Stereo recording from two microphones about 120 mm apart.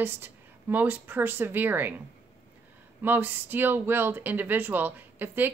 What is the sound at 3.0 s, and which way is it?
Speech, 15° right (ahead or behind).